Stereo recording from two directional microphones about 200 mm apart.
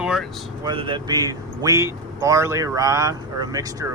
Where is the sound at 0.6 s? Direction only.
25° right (ahead or behind).